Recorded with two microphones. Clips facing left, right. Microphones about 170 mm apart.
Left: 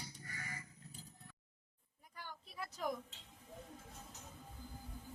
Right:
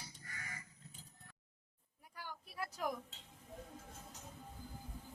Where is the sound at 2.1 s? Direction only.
10° right (ahead or behind).